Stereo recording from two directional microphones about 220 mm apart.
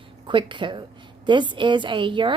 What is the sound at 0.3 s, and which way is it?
A woman's voice, 20° right (ahead or behind).